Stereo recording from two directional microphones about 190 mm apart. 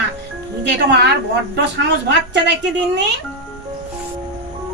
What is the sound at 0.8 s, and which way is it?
A woman's voice, 60° right (ahead or behind).